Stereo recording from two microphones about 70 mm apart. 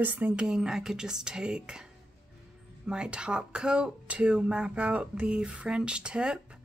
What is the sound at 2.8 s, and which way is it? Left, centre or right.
Speech, centre.